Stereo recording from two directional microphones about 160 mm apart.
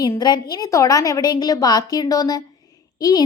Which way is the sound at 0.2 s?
25° left (ahead or behind).